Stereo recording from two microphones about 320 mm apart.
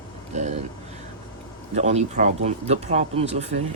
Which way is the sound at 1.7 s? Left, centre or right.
Right.